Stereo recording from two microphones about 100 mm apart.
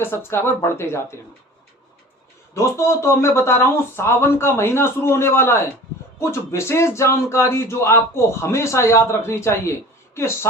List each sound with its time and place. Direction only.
0.0 s speech: 25° left (ahead or behind)
2.6 s speech: 30° left (ahead or behind)